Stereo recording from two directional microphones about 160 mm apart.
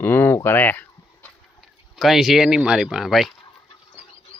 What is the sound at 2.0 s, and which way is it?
Speech, centre (ahead or behind).